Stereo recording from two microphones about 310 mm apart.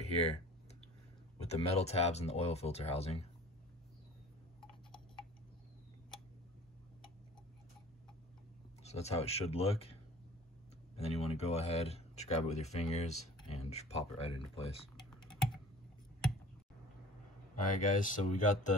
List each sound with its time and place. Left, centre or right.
0.0 s speech: centre
1.4 s speech: left
8.8 s speech: left
11.0 s speech: centre
15.0 s typing: centre
17.6 s speech: left